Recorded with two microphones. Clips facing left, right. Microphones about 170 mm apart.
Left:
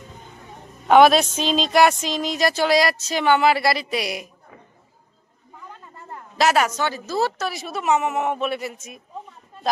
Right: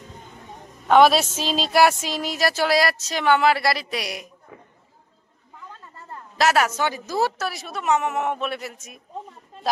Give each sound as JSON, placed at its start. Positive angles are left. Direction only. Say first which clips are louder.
{"t": 0.8, "sound": "a woman's voice", "louder": "left 2 dB", "side_deg": 0}
{"t": 5.7, "sound": "a sound", "louder": "left 2 dB", "side_deg": 15}
{"t": 6.3, "sound": "a woman's voice", "louder": "left 1 dB", "side_deg": 0}